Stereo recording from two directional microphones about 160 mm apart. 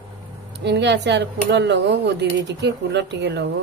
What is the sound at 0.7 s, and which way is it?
Speech, 90° right.